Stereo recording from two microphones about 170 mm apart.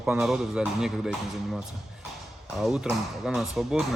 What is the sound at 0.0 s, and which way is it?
Speech, 5° right (ahead or behind).